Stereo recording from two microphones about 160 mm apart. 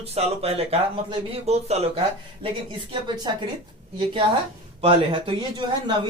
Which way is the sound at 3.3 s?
25° right (ahead or behind).